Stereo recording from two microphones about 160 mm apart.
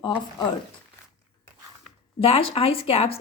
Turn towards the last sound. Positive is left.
turn(degrees=40)  # may be behind; listen again after turning